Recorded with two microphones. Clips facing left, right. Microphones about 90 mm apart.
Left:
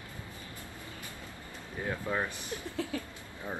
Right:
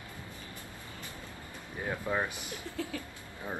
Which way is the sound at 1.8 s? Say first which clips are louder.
Right 1 dB; 10° right (ahead or behind).